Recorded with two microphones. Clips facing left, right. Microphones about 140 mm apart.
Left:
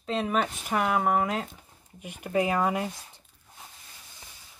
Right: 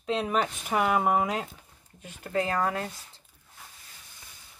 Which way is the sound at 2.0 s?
15° left (ahead or behind).